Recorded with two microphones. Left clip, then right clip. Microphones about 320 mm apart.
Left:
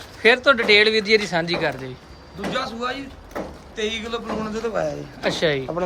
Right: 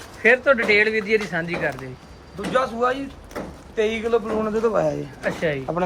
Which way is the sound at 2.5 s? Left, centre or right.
Centre.